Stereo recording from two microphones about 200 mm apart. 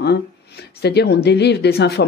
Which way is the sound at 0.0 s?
55° left (ahead or behind).